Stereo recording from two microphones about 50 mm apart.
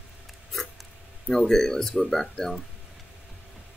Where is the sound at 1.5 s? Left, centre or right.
Centre.